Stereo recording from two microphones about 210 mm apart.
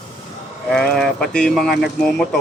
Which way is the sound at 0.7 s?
Centre (ahead or behind).